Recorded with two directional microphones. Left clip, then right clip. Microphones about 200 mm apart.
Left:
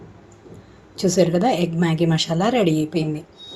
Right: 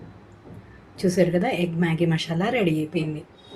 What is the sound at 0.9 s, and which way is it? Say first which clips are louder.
A woman's voice: left 3 dB; 30° left (ahead or behind).